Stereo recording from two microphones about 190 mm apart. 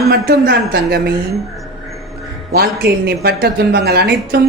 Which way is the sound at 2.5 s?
55° right (ahead or behind).